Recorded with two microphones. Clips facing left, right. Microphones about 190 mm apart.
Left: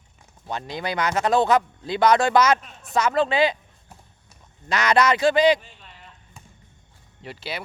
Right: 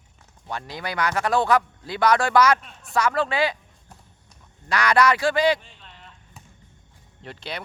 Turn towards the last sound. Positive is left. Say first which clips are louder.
# left 1 dB
turn(degrees=5)  # may be behind; listen again after turning